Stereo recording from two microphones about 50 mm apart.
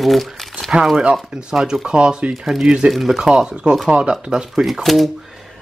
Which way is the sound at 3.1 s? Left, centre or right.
Centre.